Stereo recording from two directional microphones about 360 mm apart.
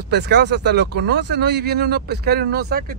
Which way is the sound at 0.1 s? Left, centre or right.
Right.